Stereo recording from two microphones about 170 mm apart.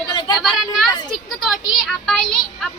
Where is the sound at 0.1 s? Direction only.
25° left (ahead or behind).